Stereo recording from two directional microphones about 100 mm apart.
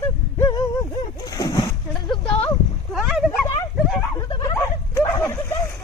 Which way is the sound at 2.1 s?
10° left (ahead or behind).